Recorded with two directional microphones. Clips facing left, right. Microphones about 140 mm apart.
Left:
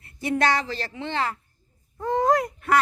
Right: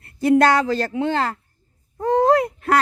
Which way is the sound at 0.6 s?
50° right (ahead or behind).